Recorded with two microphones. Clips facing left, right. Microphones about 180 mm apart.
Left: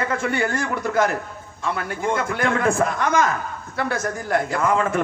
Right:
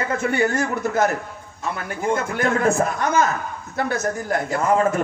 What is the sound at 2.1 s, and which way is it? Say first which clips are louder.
Speech: right 1 dB; 40° right (ahead or behind).